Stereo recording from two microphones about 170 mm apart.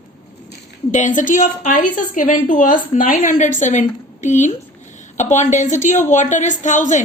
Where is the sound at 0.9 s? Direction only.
45° left (ahead or behind).